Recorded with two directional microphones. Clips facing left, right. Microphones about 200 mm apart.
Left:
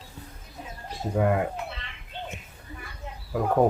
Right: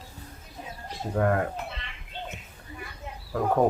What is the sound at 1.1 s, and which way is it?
Speech, 10° left (ahead or behind).